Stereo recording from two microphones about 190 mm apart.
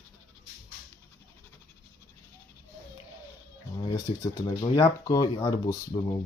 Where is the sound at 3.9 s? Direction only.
20° left (ahead or behind).